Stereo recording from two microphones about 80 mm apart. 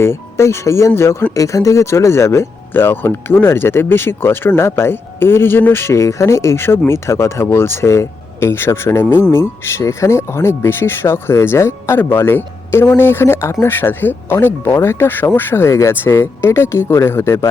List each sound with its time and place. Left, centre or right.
0.0 s speech: left